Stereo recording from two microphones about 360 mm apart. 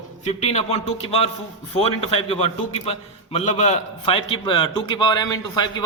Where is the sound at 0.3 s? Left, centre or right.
Centre.